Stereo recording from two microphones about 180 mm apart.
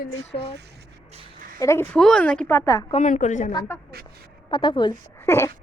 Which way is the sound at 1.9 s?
5° left (ahead or behind).